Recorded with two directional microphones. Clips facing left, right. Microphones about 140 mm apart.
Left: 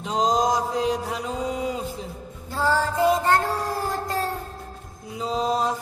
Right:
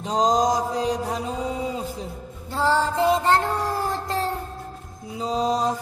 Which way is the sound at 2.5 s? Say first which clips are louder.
Right 2 dB; 25° right (ahead or behind).